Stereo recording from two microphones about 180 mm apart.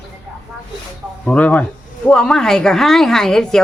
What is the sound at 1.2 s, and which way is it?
A man's voice, 5° left (ahead or behind).